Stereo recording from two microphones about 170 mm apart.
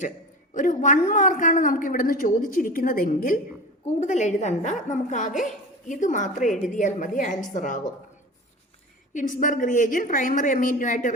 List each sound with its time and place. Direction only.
0.5 s a woman's voice: 50° left (ahead or behind)
3.8 s a woman's voice: 45° left (ahead or behind)
9.1 s a woman's voice: 50° left (ahead or behind)